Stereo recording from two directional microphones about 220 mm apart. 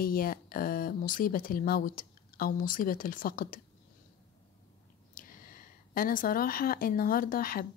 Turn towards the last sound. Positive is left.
turn(degrees=40)  # may be behind; listen again after turning